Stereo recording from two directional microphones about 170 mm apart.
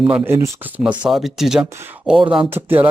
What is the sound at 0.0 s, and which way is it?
Speech, 10° right (ahead or behind).